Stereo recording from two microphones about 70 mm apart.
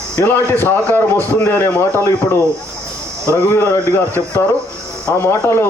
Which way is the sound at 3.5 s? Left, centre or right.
Left.